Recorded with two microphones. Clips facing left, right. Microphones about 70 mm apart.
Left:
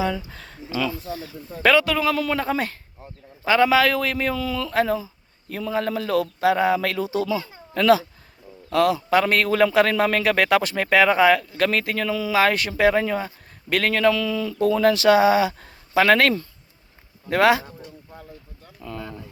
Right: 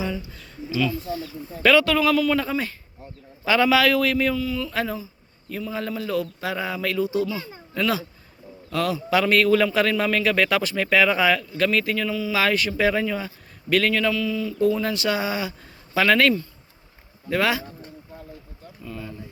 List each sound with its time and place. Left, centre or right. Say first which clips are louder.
0.0 s speech: left 4 dB; left
1.7 s speech: right 2 dB; left
2.0 s speech: right 2 dB; left
3.4 s speech: left 1 dB; left
4.4 s speech: even; left
4.7 s speech: left 5 dB; left
7.0 s speech: right 1 dB; left
7.7 s speech: left 7 dB; left
8.7 s a man's voice: left 4 dB; left
14.1 s speech: left 2 dB; left
15.6 s a sound: left 3 dB; left
17.2 s speech: left 5 dB; left
18.8 s a sound: left 2 dB; left